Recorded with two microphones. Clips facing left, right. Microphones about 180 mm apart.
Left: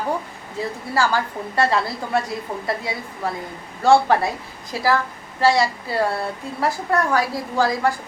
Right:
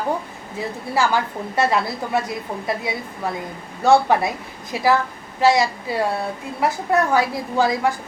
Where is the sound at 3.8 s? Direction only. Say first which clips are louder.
Even; 20° right (ahead or behind).